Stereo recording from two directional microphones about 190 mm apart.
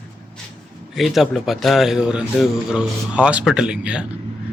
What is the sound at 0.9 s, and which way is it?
A man's voice, centre (ahead or behind).